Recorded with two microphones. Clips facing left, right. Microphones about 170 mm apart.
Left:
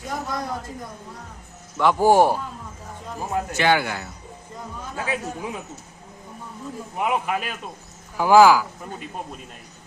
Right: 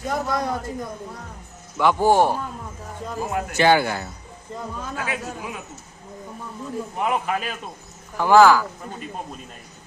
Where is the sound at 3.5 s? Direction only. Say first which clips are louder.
Right 4 dB; 35° right (ahead or behind).